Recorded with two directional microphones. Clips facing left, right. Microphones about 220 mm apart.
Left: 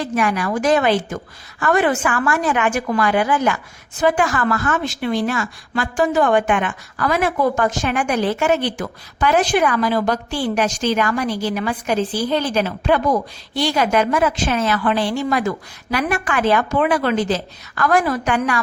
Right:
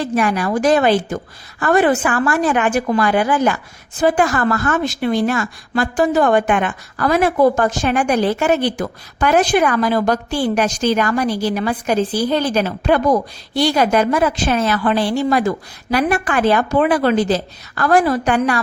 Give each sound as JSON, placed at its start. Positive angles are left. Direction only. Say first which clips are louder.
{"t": 0.0, "sound": "a woman's voice", "louder": "right 2 dB", "side_deg": -35}